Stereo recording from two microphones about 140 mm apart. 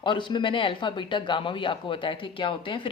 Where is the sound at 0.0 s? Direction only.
35° left (ahead or behind).